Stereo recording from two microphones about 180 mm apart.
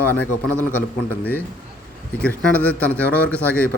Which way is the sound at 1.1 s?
10° left (ahead or behind).